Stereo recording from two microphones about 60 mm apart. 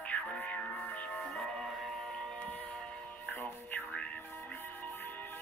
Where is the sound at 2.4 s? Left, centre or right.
Left.